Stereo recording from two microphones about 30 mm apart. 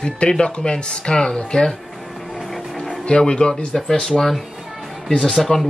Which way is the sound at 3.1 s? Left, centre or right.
Left.